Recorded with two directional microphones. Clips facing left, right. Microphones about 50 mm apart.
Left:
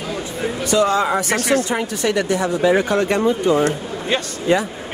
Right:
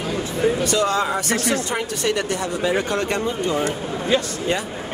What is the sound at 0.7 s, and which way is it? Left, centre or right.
Speech, centre.